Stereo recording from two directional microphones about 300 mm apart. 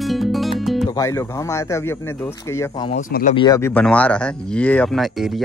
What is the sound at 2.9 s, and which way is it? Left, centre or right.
Speech, left.